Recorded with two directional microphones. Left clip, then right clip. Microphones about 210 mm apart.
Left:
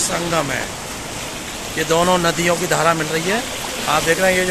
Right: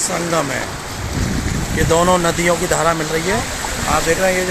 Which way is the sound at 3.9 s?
Centre (ahead or behind).